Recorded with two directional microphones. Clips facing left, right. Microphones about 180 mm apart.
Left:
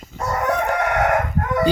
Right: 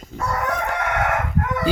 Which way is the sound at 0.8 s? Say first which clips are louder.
Left 4 dB; 35° left (ahead or behind).